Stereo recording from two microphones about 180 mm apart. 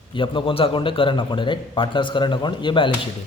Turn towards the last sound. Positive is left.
turn(degrees=25)  # may be behind; listen again after turning